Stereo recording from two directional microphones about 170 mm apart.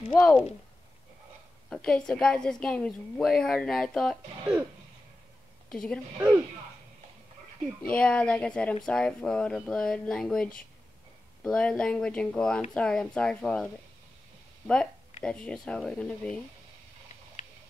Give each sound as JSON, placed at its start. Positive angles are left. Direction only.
{"t": 0.1, "sound": "a woman's voice", "side_deg": 0}
{"t": 1.7, "sound": "a woman's voice", "side_deg": 5}
{"t": 5.7, "sound": "a woman's voice", "side_deg": 5}
{"t": 7.9, "sound": "a woman's voice", "side_deg": 5}
{"t": 15.2, "sound": "a woman's voice", "side_deg": 5}